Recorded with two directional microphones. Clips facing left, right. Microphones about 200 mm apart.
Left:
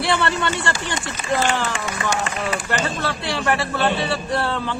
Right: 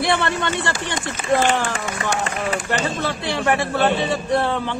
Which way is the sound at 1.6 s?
50° right (ahead or behind).